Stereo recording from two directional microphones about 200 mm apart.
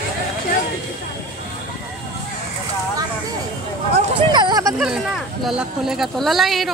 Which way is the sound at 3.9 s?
20° right (ahead or behind).